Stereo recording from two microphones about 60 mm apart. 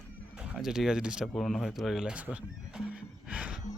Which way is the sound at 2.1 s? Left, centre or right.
Right.